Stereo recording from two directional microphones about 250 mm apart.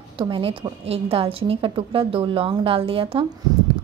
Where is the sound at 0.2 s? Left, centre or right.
Centre.